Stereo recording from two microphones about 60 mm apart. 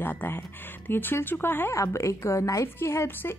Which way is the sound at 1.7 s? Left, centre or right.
Left.